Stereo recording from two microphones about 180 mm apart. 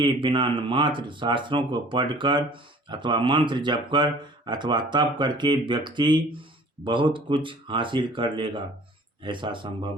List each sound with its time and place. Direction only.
0.0 s speech: 30° right (ahead or behind)